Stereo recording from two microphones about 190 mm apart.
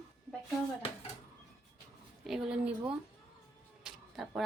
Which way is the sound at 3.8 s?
Centre (ahead or behind).